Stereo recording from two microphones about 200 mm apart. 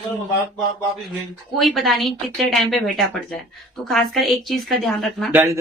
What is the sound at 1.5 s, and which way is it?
Speech, centre (ahead or behind).